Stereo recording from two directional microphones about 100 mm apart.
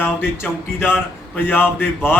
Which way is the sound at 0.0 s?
20° left (ahead or behind).